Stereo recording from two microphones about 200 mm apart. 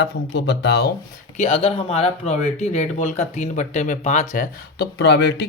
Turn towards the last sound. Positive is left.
turn(degrees=55)  # may be behind; listen again after turning